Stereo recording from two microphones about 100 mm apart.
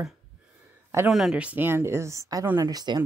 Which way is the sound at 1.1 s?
5° right (ahead or behind).